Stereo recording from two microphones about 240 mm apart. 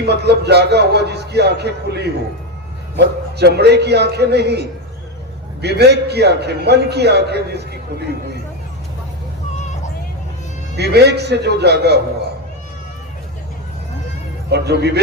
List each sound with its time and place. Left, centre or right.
0.0 s a man's voice: right
5.6 s a man's voice: right
10.8 s a man's voice: right
14.5 s a man's voice: right